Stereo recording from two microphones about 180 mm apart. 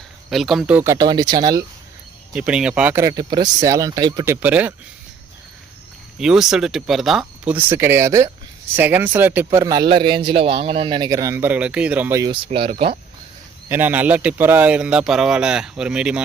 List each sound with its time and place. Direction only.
0.3 s a man's voice: centre (ahead or behind); by 1.6 s 20° right (ahead or behind)
2.3 s speech: 5° right (ahead or behind)
3.0 s a man's voice: 20° right (ahead or behind)
4.4 s speech: 10° right (ahead or behind)
6.1 s speech: 5° right (ahead or behind)
9.9 s a man's voice: 25° right (ahead or behind)
12.5 s speech: 30° right (ahead or behind)
13.7 s speech: 10° right (ahead or behind)